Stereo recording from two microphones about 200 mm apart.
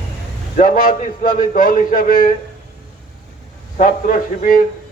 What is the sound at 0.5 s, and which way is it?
A man's voice, 45° left (ahead or behind).